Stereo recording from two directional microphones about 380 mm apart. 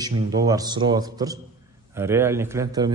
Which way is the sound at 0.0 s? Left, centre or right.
Centre.